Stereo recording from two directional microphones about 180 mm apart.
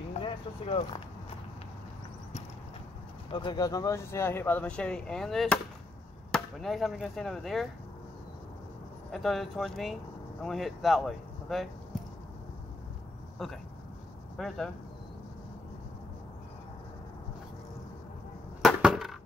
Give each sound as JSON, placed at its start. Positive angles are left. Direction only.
{"t": 0.1, "sound": "speech", "side_deg": 30}
{"t": 3.3, "sound": "speech", "side_deg": 25}
{"t": 9.1, "sound": "speech", "side_deg": 0}
{"t": 13.4, "sound": "speech", "side_deg": 0}
{"t": 18.6, "sound": "a sound", "side_deg": 0}